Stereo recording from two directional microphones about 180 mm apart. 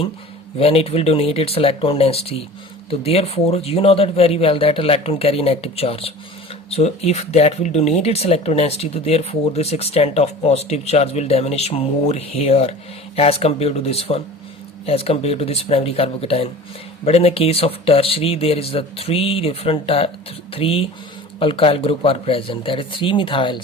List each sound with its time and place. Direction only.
0.6 s speech: 35° left (ahead or behind)